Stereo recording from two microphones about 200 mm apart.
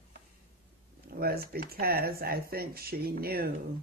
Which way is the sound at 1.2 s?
50° right (ahead or behind).